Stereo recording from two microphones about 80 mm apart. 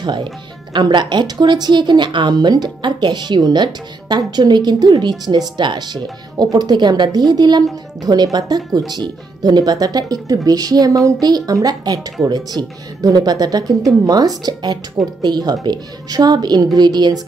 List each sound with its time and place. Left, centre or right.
0.0 s a woman's voice: right